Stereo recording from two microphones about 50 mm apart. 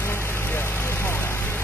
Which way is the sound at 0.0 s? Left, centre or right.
Left.